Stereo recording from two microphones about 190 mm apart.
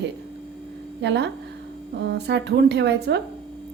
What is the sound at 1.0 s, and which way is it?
A woman's voice, 65° right (ahead or behind).